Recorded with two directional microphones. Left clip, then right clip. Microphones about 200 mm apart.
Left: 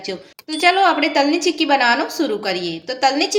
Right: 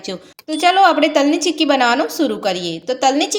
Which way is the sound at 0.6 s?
40° right (ahead or behind).